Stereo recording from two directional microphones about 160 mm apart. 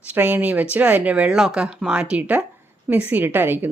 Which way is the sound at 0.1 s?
10° right (ahead or behind).